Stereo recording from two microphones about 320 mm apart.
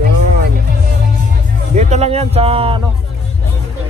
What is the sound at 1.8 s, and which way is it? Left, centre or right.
Speech, right.